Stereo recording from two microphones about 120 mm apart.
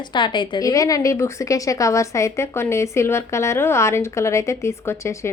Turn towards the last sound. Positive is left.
turn(degrees=20)  # may be behind; listen again after turning